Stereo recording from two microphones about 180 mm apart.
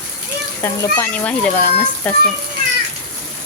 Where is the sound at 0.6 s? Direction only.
10° left (ahead or behind).